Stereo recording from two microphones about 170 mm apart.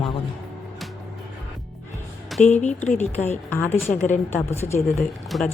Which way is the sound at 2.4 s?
45° left (ahead or behind).